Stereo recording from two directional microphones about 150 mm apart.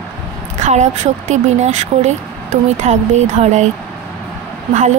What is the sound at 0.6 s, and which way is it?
Speech, 50° right (ahead or behind).